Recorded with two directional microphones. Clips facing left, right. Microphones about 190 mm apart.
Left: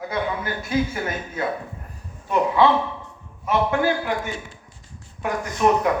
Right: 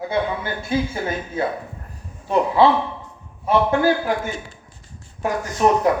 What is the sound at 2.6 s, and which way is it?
A man's voice, 30° right (ahead or behind).